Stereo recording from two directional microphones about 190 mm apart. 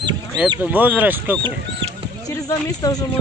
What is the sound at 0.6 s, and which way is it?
Speech, 10° right (ahead or behind).